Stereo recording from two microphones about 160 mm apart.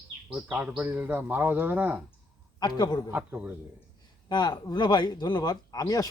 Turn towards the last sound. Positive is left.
turn(degrees=25)  # may be behind; listen again after turning